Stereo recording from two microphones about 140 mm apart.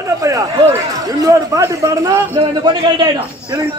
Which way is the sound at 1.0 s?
25° right (ahead or behind).